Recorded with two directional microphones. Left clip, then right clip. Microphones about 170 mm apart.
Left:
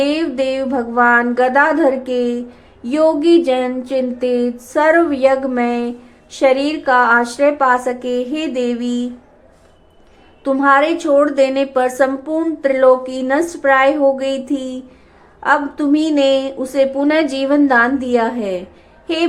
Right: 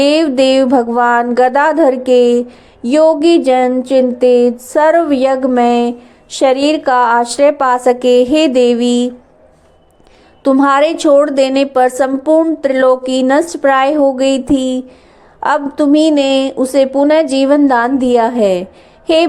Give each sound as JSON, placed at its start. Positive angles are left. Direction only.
{"t": 0.0, "sound": "speech", "side_deg": -40}
{"t": 10.6, "sound": "speech", "side_deg": -40}
{"t": 19.0, "sound": "a sound", "side_deg": -35}